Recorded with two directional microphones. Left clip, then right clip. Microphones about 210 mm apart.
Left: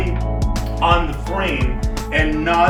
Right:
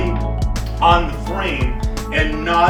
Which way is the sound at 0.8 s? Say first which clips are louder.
Right 3 dB; 5° right (ahead or behind).